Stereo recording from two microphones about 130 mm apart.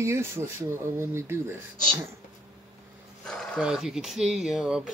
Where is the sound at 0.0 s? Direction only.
20° right (ahead or behind).